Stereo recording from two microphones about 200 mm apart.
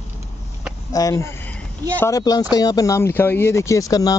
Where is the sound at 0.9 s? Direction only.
15° left (ahead or behind).